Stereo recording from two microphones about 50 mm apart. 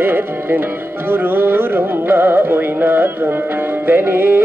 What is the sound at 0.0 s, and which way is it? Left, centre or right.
Music, right.